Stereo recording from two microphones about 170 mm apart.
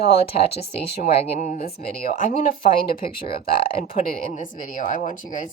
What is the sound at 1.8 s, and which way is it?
A woman's voice, 50° left (ahead or behind).